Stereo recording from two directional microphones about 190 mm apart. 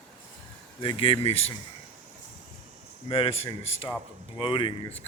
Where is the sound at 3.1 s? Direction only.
30° left (ahead or behind).